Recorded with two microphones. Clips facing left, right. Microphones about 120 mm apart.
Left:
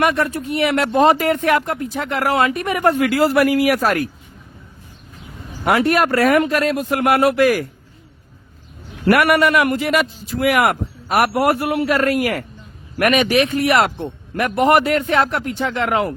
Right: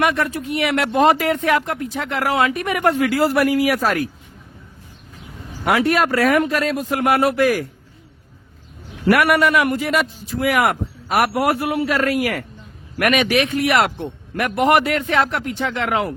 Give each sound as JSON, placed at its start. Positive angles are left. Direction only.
{"t": 0.0, "sound": "a man's voice", "side_deg": 40}
{"t": 1.3, "sound": "speech", "side_deg": 50}
{"t": 1.7, "sound": "a man's voice", "side_deg": 35}
{"t": 2.6, "sound": "speech", "side_deg": 30}
{"t": 3.1, "sound": "speech", "side_deg": 90}
{"t": 5.6, "sound": "speech", "side_deg": 45}
{"t": 6.4, "sound": "speech", "side_deg": 60}
{"t": 9.0, "sound": "a man's voice", "side_deg": 55}
{"t": 11.2, "sound": "a man's voice", "side_deg": 45}